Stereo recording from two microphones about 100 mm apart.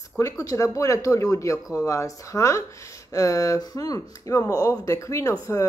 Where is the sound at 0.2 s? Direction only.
30° left (ahead or behind).